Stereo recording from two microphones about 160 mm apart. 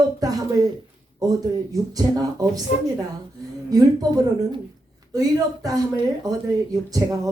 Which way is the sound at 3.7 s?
25° right (ahead or behind).